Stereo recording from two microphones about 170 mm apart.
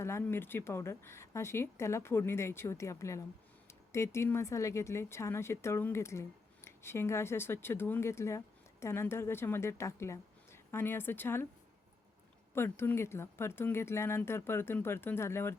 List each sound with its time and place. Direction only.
0.0 s speech: 15° left (ahead or behind)
12.5 s speech: 15° left (ahead or behind)